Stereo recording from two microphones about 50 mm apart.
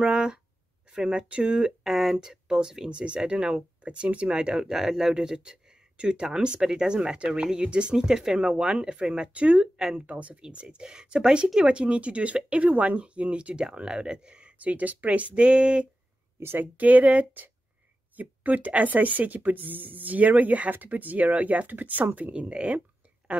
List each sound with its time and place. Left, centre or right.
0.0 s speech: centre
1.8 s speech: centre
2.9 s speech: right
9.8 s speech: centre
10.0 s speech: right
14.6 s speech: right
16.3 s a woman's voice: right
16.7 s speech: right